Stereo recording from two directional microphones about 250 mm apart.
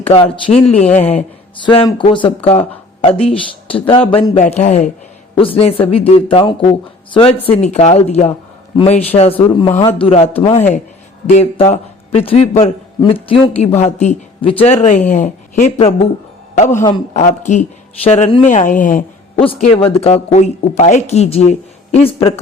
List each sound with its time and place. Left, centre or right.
0.1 s a woman's voice: left
16.7 s a woman's voice: centre